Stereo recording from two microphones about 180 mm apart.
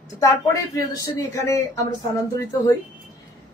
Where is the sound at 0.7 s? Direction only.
20° left (ahead or behind).